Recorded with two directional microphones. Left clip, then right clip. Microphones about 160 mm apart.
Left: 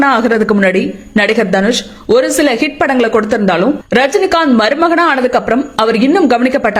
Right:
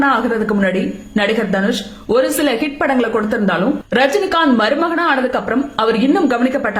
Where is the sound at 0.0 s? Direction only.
40° left (ahead or behind).